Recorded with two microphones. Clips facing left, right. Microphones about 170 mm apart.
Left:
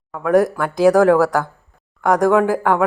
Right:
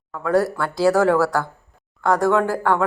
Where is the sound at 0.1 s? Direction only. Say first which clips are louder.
Left 4 dB; 15° left (ahead or behind).